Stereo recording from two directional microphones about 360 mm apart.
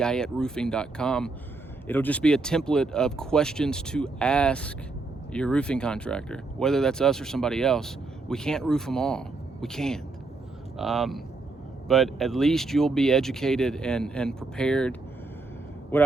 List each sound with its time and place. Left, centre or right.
0.0 s a man's voice: centre